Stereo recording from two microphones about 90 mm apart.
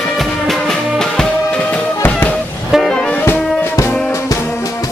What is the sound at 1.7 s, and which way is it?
Music, 20° left (ahead or behind).